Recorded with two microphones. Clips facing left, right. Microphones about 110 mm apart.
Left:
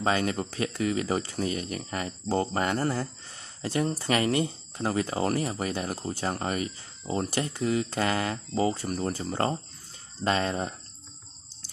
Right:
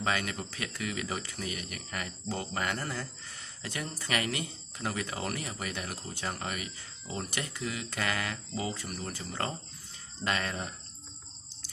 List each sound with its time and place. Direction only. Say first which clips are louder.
0.0 s speech: left 6 dB; 35° left (ahead or behind)